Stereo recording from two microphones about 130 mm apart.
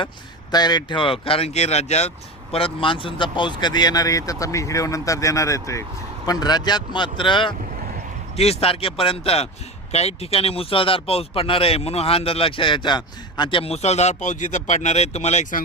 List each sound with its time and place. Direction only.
0.5 s speech: 30° left (ahead or behind)
8.4 s speech: 50° left (ahead or behind)